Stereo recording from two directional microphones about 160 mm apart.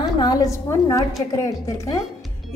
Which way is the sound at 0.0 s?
25° left (ahead or behind).